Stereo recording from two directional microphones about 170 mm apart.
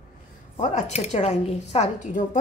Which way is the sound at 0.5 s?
40° left (ahead or behind).